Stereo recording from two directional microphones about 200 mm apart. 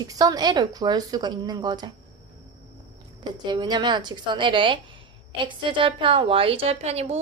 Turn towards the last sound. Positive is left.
turn(degrees=-30)  # may be behind; listen again after turning